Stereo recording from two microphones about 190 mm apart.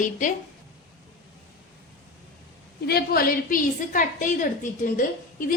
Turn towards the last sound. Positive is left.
turn(degrees=45)  # may be behind; listen again after turning